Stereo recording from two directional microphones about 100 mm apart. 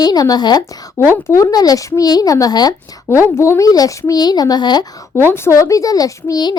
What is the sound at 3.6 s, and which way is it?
Speech, 35° left (ahead or behind).